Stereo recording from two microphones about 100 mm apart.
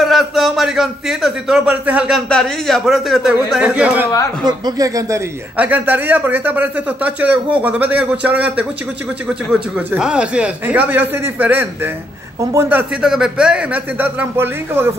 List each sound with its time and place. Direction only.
0.0 s a man's voice: centre (ahead or behind)
2.2 s a man's voice: 5° left (ahead or behind); by 4.1 s 15° right (ahead or behind)
4.5 s speech: 40° right (ahead or behind)
5.6 s a man's voice: 20° right (ahead or behind)
13.0 s speech: 5° right (ahead or behind); by 14.9 s 25° right (ahead or behind)